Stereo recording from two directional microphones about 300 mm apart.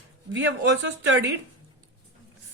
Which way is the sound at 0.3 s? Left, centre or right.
Right.